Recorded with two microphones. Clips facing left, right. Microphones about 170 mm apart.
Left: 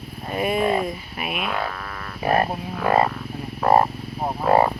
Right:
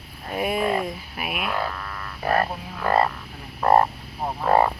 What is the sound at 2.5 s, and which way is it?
Frog, 15° left (ahead or behind).